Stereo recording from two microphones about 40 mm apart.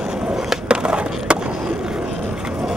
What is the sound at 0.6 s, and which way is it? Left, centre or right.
Skateboard, right.